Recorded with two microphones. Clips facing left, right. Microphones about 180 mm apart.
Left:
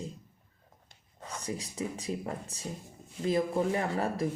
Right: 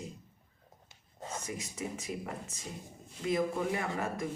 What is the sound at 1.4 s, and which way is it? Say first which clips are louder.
Speech: left 7 dB; 30° left (ahead or behind).